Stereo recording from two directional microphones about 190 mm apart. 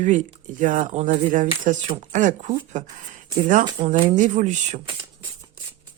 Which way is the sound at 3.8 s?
30° right (ahead or behind).